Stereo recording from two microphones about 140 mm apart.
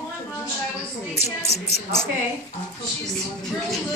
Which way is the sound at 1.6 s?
50° left (ahead or behind).